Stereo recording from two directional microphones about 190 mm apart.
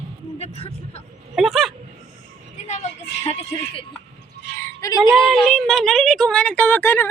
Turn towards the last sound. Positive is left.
turn(degrees=10)  # may be behind; listen again after turning